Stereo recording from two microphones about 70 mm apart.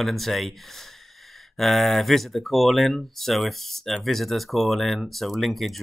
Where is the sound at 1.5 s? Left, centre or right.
Centre.